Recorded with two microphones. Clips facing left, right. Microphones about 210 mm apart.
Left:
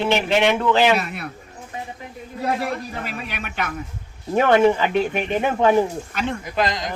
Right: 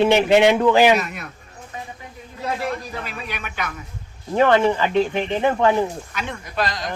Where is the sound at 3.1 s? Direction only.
50° left (ahead or behind).